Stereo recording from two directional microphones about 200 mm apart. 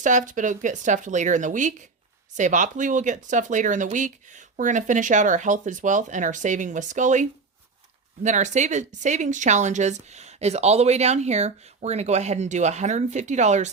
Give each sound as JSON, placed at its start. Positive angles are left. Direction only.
{"t": 0.0, "sound": "speech", "side_deg": -40}